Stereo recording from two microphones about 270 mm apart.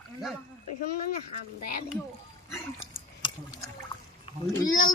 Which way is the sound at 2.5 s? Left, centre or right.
Centre.